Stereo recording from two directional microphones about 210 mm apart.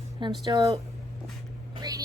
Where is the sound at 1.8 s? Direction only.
15° right (ahead or behind).